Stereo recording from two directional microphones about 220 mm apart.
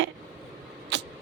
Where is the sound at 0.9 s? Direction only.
55° right (ahead or behind).